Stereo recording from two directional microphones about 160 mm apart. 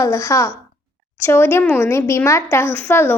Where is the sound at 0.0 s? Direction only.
20° left (ahead or behind).